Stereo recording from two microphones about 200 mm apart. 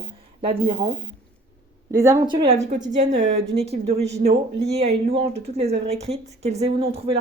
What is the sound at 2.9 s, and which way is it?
Speech, 35° right (ahead or behind).